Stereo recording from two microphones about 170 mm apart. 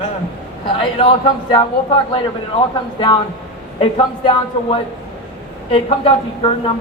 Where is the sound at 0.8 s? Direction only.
30° left (ahead or behind).